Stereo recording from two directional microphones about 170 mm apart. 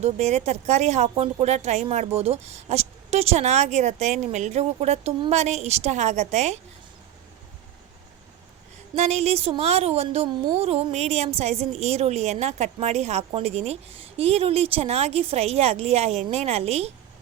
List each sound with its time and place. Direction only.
0.0 s speech: 40° right (ahead or behind)
9.0 s speech: 40° right (ahead or behind)